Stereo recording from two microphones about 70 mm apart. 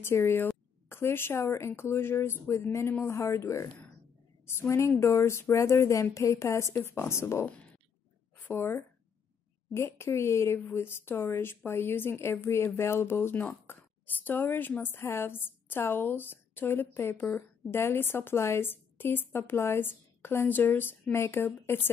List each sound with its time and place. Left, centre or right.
0.0 s a woman's voice: left